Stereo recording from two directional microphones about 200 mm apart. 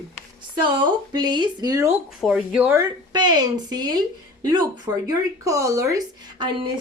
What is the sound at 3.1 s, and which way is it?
A woman's voice, 20° right (ahead or behind).